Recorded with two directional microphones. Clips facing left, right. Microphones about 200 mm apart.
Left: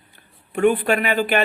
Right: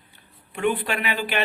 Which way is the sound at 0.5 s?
45° left (ahead or behind).